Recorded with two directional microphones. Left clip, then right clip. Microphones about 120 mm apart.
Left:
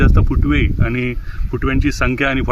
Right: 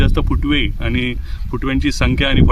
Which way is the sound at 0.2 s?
30° right (ahead or behind).